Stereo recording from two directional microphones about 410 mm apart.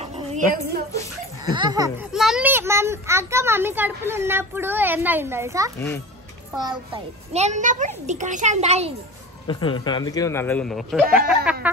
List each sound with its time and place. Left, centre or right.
0.0 s a sound: centre
1.4 s a child's voice: centre
9.5 s speech: centre